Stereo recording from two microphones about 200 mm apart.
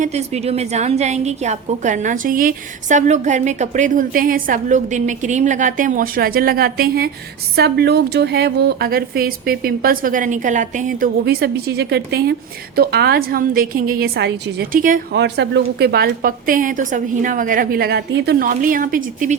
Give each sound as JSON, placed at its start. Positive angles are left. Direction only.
{"t": 0.0, "sound": "a woman's voice", "side_deg": -35}
{"t": 15.1, "sound": "a woman's voice", "side_deg": -60}